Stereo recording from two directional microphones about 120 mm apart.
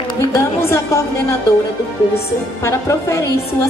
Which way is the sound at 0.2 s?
25° left (ahead or behind).